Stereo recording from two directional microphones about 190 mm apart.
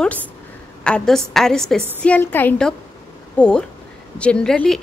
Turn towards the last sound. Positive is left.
turn(degrees=5)  # may be behind; listen again after turning